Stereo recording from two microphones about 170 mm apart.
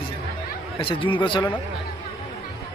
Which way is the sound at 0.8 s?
30° left (ahead or behind).